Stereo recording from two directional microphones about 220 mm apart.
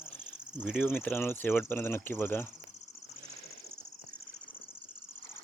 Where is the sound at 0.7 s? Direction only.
10° left (ahead or behind).